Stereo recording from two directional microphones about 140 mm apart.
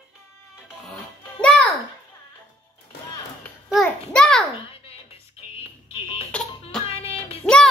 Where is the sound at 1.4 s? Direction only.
10° left (ahead or behind).